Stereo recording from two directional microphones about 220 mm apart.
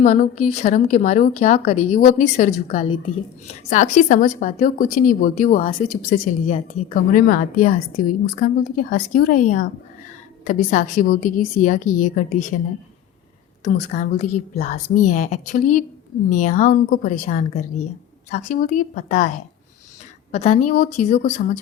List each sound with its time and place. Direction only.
0.0 s a woman's voice: 35° left (ahead or behind)
2.7 s a woman's voice: 25° left (ahead or behind)
13.7 s a woman's voice: 35° left (ahead or behind)
20.3 s a woman's voice: 30° left (ahead or behind)